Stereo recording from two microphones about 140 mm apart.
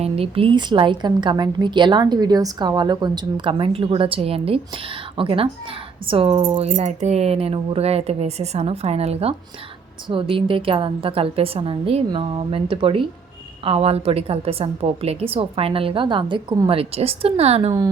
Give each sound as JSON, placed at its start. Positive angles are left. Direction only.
{"t": 0.0, "sound": "a woman's voice", "side_deg": -40}
{"t": 17.7, "sound": "speech", "side_deg": -25}